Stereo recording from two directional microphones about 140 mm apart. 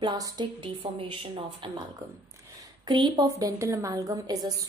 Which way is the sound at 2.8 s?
30° right (ahead or behind).